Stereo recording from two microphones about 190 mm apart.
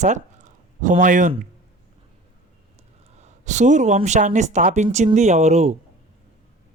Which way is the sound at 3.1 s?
35° right (ahead or behind).